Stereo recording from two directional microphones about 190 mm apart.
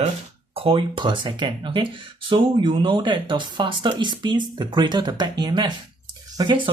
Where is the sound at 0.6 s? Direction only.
25° right (ahead or behind).